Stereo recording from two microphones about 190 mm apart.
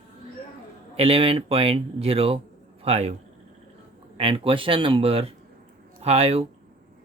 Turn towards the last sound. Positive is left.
turn(degrees=-30)  # may be behind; listen again after turning